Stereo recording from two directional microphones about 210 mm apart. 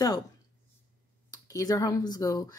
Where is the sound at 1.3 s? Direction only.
15° left (ahead or behind).